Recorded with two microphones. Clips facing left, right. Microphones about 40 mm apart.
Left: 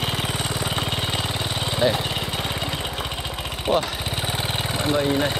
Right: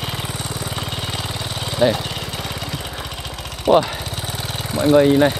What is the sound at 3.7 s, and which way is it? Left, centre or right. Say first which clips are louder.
Speech: right 7 dB; centre.